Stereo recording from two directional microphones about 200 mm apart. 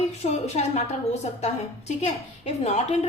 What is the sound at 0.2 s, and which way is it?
Speech, 35° left (ahead or behind).